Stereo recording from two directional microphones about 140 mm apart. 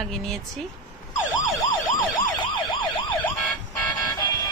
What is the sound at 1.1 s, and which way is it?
Emergency vehicle, 25° left (ahead or behind).